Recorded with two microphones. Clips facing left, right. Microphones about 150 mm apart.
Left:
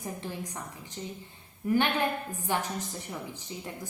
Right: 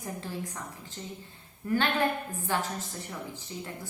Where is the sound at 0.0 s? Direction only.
15° left (ahead or behind).